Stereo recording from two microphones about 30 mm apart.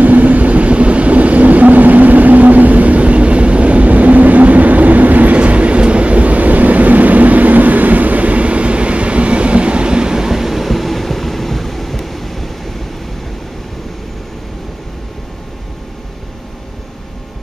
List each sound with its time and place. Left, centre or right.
0.0 s vehicle: right
5.4 s train: right; by 12.7 s centre